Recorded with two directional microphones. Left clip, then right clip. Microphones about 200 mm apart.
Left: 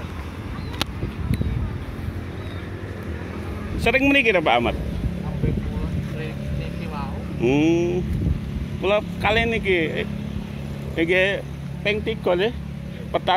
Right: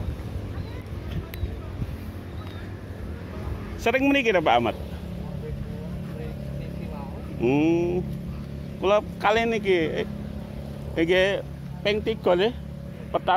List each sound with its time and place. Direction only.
3.8 s a man's voice: 10° right (ahead or behind)
7.4 s a man's voice: 10° right (ahead or behind)
8.8 s speech: 20° right (ahead or behind)
13.1 s speech: centre (ahead or behind)